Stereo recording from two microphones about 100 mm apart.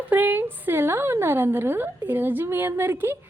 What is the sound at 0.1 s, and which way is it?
A woman's voice, 20° right (ahead or behind).